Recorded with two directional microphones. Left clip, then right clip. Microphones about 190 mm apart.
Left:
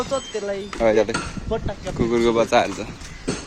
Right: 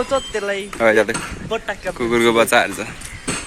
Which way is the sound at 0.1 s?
30° right (ahead or behind).